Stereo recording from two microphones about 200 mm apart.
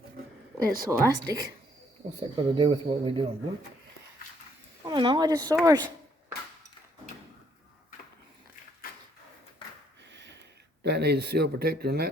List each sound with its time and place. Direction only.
0.6 s speech: 45° right (ahead or behind)
0.9 s speech: 20° right (ahead or behind)
4.9 s speech: 25° right (ahead or behind)
10.1 s a sound: 60° right (ahead or behind)
10.8 s speech: 55° right (ahead or behind)